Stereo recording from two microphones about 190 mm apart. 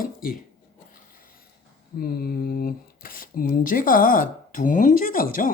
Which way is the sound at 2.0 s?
50° left (ahead or behind).